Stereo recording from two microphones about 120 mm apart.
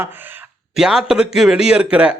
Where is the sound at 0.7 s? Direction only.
5° right (ahead or behind).